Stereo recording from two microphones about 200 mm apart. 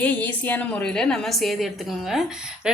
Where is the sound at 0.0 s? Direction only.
10° left (ahead or behind).